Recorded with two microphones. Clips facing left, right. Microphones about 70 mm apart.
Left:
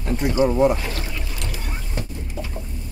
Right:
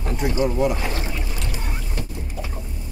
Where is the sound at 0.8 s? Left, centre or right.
Right.